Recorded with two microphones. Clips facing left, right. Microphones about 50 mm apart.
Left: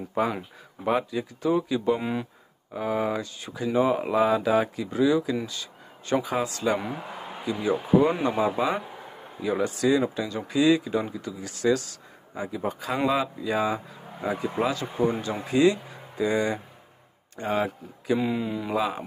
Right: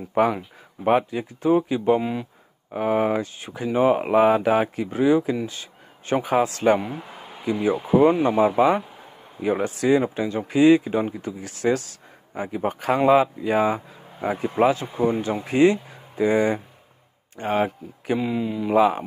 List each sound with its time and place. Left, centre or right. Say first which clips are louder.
0.2 s speech: right 6 dB; right
0.8 s speech: right 5 dB; right
2.0 s speech: right 4 dB; centre
2.7 s speech: right 5 dB; right
14.8 s speech: right 3 dB; right
15.4 s speech: right 3 dB; right
18.2 s speech: right 2 dB; centre
18.7 s speech: right 10 dB; right